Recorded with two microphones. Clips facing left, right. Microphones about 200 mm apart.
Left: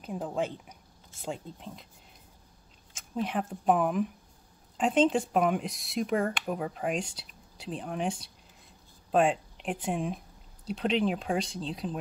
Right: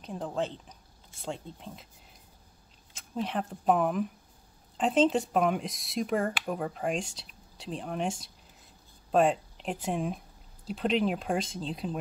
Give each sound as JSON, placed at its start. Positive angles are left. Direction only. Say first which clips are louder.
{"t": 0.0, "sound": "a woman's voice", "louder": "left 1 dB", "side_deg": 5}
{"t": 3.2, "sound": "speech", "louder": "left 1 dB", "side_deg": 0}
{"t": 9.1, "sound": "speech", "louder": "right 1 dB", "side_deg": 0}